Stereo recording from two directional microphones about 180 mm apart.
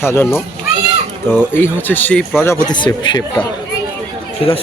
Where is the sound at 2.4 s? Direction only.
20° left (ahead or behind).